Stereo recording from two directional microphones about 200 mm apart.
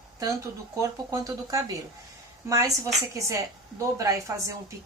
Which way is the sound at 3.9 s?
15° right (ahead or behind).